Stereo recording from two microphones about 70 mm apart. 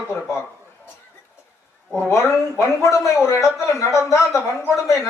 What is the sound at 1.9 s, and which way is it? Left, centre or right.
A man's voice, left.